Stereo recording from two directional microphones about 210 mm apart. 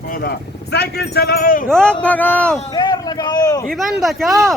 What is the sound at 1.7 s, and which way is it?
Speech, 5° left (ahead or behind).